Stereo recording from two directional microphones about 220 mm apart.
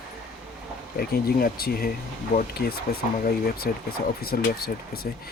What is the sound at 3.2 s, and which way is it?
Speech, 45° left (ahead or behind).